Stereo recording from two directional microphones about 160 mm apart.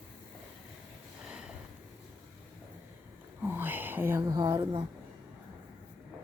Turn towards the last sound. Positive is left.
turn(degrees=-25)  # may be behind; listen again after turning